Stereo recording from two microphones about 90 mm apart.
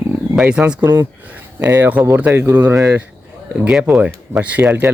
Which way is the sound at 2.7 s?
35° right (ahead or behind).